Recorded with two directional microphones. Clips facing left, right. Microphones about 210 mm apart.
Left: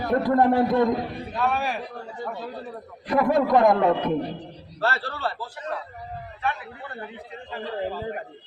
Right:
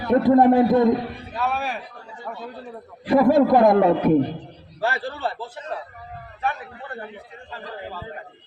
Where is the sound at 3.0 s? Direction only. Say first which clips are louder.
Right 5 dB; 30° right (ahead or behind).